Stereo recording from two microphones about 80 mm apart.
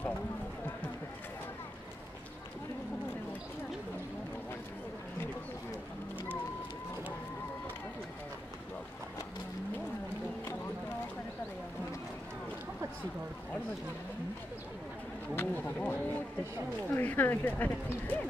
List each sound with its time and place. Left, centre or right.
15.3 s speech: left